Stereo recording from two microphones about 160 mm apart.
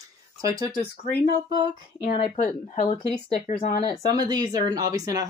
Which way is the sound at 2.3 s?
50° left (ahead or behind).